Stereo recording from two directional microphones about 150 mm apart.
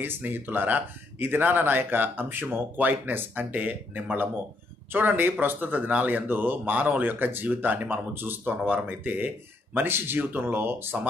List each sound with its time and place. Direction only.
0.0 s speech: 15° right (ahead or behind)